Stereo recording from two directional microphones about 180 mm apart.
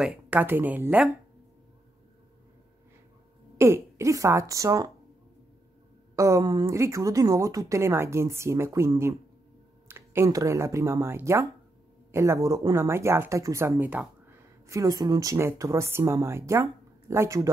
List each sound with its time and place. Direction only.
0.0 s speech: 5° right (ahead or behind)
3.5 s speech: 15° right (ahead or behind)
6.1 s speech: 15° right (ahead or behind)